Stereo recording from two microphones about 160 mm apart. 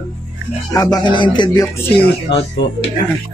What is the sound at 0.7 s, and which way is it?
Speech, 5° left (ahead or behind).